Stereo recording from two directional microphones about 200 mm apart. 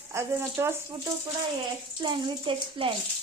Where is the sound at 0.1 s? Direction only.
15° right (ahead or behind).